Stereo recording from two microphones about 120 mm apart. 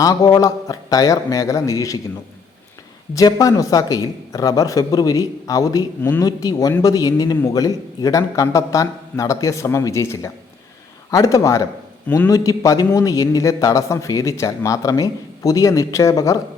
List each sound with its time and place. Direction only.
0.0 s speech: 30° left (ahead or behind)
3.2 s speech: 30° left (ahead or behind)
6.0 s speech: 15° left (ahead or behind)
6.2 s speech: 30° left (ahead or behind)
12.0 s speech: 15° left (ahead or behind)
12.3 s speech: 30° left (ahead or behind)